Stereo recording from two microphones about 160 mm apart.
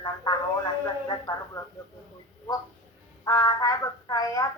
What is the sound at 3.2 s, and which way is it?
Music, 20° left (ahead or behind).